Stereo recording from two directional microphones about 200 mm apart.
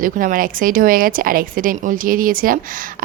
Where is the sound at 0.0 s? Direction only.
45° right (ahead or behind).